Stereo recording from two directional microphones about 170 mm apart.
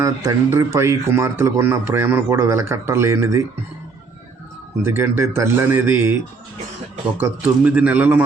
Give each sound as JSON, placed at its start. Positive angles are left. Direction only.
{"t": 0.0, "sound": "speech", "side_deg": -20}
{"t": 4.8, "sound": "speech", "side_deg": -15}
{"t": 7.2, "sound": "speech", "side_deg": -10}